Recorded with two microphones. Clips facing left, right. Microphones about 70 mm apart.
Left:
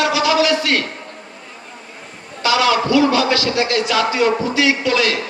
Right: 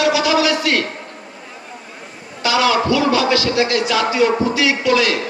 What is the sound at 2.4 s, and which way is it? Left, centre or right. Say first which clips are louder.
Speech: even; left.